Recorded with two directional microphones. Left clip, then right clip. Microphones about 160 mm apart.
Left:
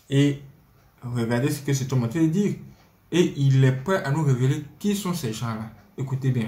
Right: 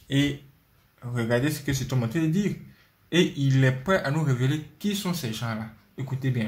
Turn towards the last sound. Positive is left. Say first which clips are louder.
# left 2 dB
turn(degrees=-40)  # may be behind; listen again after turning